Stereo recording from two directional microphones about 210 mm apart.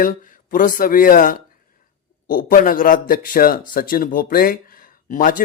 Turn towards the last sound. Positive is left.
turn(degrees=40)  # may be behind; listen again after turning